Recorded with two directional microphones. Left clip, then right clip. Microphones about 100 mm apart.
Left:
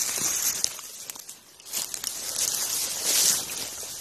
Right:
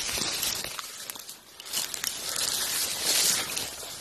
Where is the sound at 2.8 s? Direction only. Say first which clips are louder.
Left 2 dB; centre (ahead or behind).